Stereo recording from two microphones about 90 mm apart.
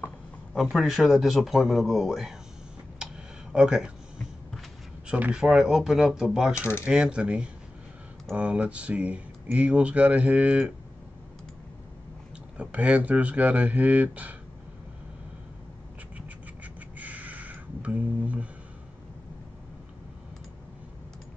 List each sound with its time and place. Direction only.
0.6 s speech: 5° right (ahead or behind)
3.5 s speech: 10° right (ahead or behind)
5.0 s speech: 10° right (ahead or behind)
12.5 s speech: 15° right (ahead or behind)
16.2 s a sound: 15° right (ahead or behind)